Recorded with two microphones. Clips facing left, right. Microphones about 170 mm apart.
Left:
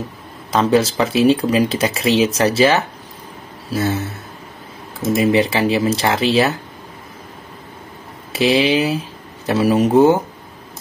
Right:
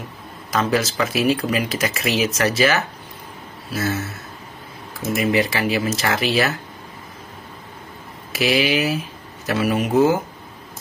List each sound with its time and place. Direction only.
0.5 s speech: 30° left (ahead or behind)
5.1 s speech: 30° left (ahead or behind)
8.3 s speech: 30° left (ahead or behind)